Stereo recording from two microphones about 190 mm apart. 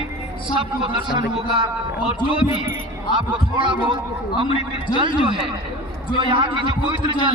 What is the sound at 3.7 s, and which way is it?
Speech, 25° right (ahead or behind).